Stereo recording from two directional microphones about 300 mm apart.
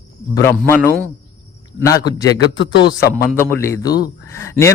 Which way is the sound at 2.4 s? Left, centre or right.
Left.